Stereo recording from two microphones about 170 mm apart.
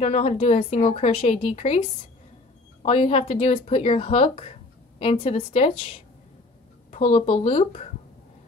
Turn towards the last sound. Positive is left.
turn(degrees=35)  # may be behind; listen again after turning